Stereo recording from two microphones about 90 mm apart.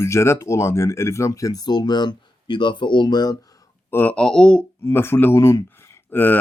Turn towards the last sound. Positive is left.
turn(degrees=20)  # may be behind; listen again after turning